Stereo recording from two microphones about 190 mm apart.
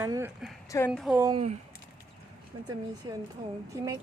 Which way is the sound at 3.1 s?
20° right (ahead or behind).